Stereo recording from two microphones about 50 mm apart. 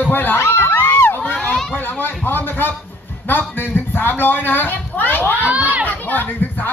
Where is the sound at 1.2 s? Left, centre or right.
Left.